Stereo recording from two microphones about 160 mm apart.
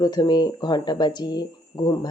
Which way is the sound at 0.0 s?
25° left (ahead or behind).